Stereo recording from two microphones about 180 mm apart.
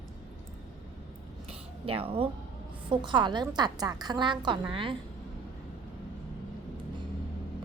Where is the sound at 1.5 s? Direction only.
30° right (ahead or behind).